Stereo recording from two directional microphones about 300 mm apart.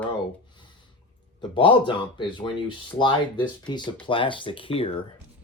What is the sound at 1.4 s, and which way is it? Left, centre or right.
Speech, centre.